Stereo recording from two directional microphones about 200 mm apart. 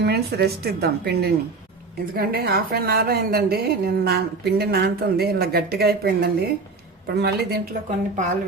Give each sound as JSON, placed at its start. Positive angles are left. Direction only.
{"t": 0.0, "sound": "a woman's voice", "side_deg": -50}
{"t": 7.9, "sound": "speech", "side_deg": -35}